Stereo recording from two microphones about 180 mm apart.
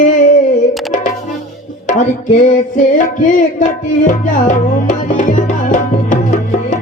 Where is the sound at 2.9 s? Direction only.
45° left (ahead or behind).